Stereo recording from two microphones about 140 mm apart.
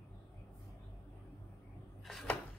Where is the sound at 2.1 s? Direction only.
5° left (ahead or behind).